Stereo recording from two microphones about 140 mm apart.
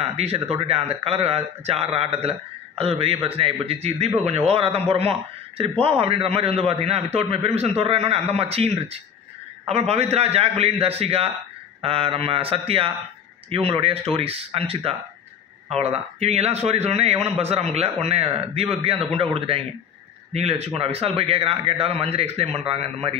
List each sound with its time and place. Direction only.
0.0 s a man's voice: 45° right (ahead or behind)